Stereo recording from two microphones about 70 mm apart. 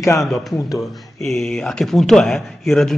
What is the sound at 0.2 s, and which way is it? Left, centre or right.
Speech, centre.